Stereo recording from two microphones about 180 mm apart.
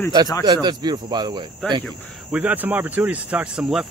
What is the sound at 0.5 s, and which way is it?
Speech, 25° right (ahead or behind).